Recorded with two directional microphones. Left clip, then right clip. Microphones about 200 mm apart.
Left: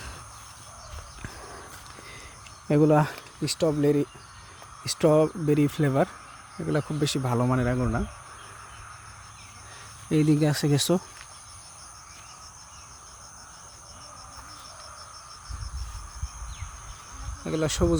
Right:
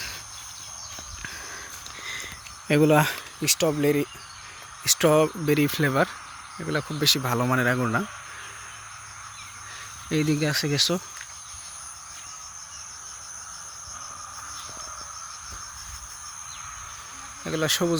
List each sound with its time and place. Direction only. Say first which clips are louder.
2.6 s speech: right 2 dB; centre (ahead or behind)
7.3 s speech: right 3 dB; 5° right (ahead or behind)
10.1 s speech: left 1 dB; 20° left (ahead or behind)
17.4 s cricket: right 2 dB; 5° left (ahead or behind)